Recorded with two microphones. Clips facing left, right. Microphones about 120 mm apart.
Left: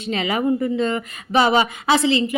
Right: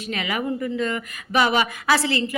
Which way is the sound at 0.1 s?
30° left (ahead or behind).